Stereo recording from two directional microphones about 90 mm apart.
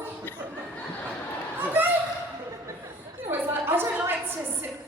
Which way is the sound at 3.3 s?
25° right (ahead or behind).